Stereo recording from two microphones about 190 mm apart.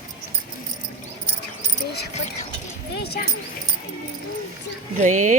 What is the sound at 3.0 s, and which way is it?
Speech, 55° left (ahead or behind).